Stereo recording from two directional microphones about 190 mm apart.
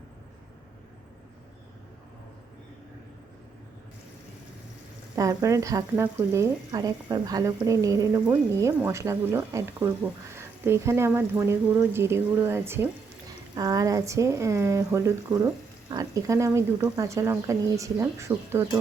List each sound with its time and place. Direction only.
5.1 s speech: 20° right (ahead or behind)